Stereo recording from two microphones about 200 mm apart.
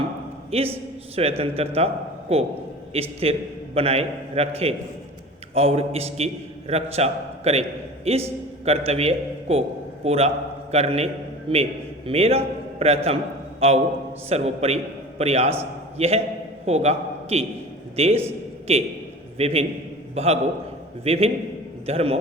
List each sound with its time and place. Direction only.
0.5 s a man's voice: 30° right (ahead or behind)
14.3 s a man's voice: 30° right (ahead or behind)